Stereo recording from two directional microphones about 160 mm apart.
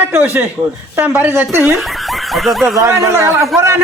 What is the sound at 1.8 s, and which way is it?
Snicker, centre (ahead or behind).